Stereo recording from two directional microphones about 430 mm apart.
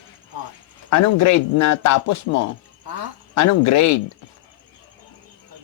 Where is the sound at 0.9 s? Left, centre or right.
Left.